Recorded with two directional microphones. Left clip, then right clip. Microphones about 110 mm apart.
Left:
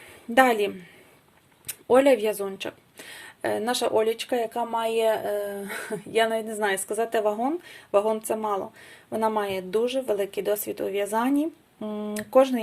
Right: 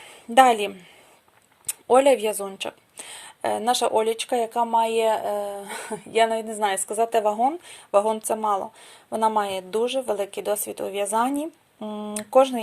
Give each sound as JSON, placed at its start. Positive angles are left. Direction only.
{"t": 0.0, "sound": "a woman's voice", "side_deg": -40}